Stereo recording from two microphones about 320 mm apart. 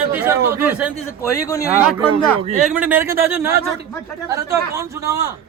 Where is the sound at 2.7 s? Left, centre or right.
Centre.